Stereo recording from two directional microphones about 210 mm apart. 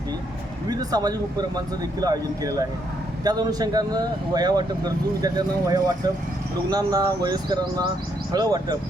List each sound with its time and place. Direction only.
0.7 s speech: 20° right (ahead or behind)